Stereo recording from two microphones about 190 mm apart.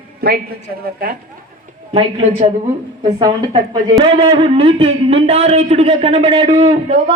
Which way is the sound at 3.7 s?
25° right (ahead or behind).